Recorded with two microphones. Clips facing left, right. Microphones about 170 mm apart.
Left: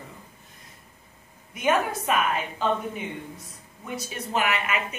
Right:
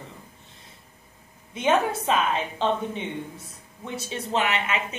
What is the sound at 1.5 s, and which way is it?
A woman's voice, 25° right (ahead or behind).